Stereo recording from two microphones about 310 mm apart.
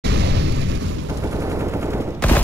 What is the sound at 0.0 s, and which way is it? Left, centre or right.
Explosion, right.